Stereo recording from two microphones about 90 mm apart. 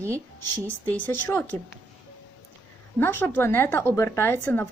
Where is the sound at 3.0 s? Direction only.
25° left (ahead or behind).